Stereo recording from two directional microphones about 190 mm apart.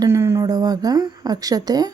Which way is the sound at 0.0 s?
15° right (ahead or behind).